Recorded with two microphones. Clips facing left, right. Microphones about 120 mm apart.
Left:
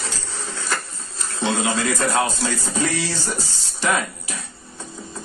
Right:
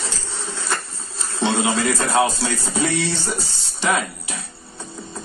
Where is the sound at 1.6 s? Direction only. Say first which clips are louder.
Right 1 dB; 25° right (ahead or behind).